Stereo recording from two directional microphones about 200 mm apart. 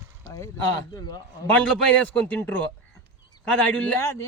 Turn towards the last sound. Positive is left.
turn(degrees=5)  # may be behind; listen again after turning